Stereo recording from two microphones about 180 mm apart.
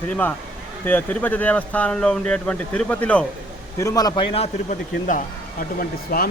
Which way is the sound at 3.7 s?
20° left (ahead or behind).